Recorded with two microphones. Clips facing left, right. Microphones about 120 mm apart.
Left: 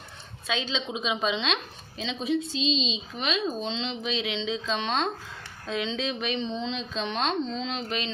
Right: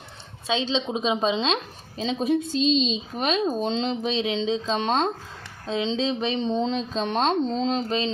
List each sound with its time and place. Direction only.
0.4 s speech: 30° right (ahead or behind)
5.6 s speech: 30° right (ahead or behind)